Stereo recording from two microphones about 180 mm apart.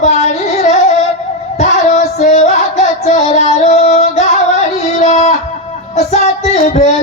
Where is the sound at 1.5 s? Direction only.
40° left (ahead or behind).